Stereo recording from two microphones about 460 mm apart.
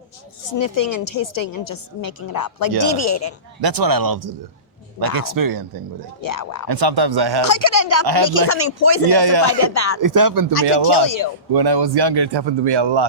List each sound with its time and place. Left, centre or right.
0.5 s a woman's voice: left
3.6 s speech: right
6.2 s a woman's voice: left
6.7 s speech: right
7.4 s a woman's voice: left
9.1 s speech: right
9.6 s speech: left
10.0 s speech: right
10.7 s a man's voice: right
11.0 s a woman's voice: left
11.5 s a man's voice: right